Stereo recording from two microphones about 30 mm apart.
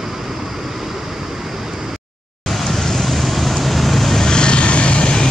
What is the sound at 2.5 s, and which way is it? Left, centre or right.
Vehicle, centre.